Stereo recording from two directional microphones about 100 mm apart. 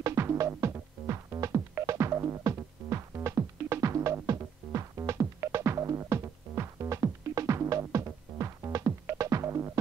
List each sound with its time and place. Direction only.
0.0 s music: 30° right (ahead or behind)